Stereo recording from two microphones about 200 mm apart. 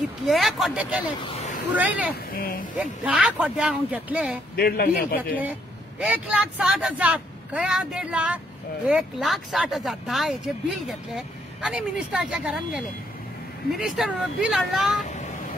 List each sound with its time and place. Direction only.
0.2 s speech: centre (ahead or behind)
2.3 s a man's voice: 45° left (ahead or behind)
2.8 s speech: 5° right (ahead or behind)
4.6 s a man's voice: 50° left (ahead or behind)
5.4 s speech: 10° right (ahead or behind)